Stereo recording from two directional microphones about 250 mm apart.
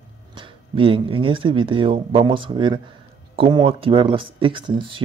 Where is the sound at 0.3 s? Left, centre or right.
Centre.